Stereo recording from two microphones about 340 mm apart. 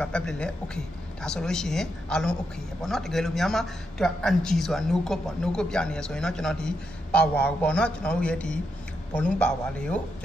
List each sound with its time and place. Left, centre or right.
0.0 s speech: centre